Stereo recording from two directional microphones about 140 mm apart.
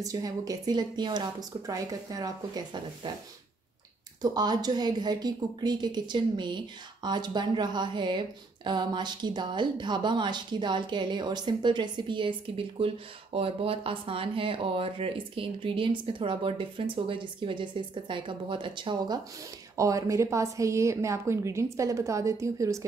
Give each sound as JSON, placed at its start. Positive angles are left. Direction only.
{"t": 0.0, "sound": "a woman's voice", "side_deg": -25}
{"t": 4.2, "sound": "a woman's voice", "side_deg": -30}
{"t": 19.8, "sound": "a woman's voice", "side_deg": -20}